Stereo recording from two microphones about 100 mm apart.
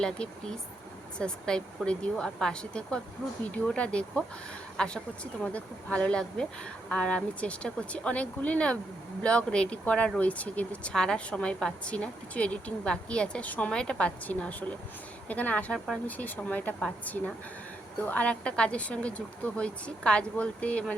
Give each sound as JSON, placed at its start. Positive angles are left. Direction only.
{"t": 0.0, "sound": "speech", "side_deg": 5}